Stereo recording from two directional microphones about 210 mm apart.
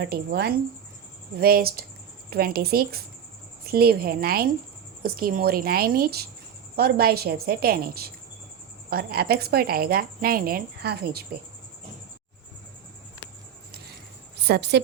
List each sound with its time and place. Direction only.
0.0 s a woman's voice: 50° right (ahead or behind)
14.4 s a woman's voice: 50° right (ahead or behind)